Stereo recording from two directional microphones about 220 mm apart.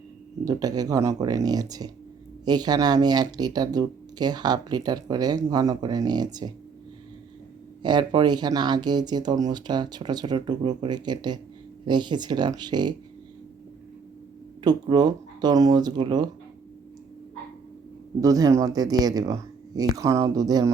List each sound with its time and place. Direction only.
0.4 s speech: 15° right (ahead or behind)
7.8 s speech: 20° right (ahead or behind)
14.6 s speech: 20° right (ahead or behind)
18.2 s speech: 15° right (ahead or behind)